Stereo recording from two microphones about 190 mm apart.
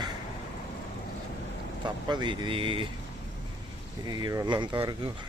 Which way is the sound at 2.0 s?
25° right (ahead or behind).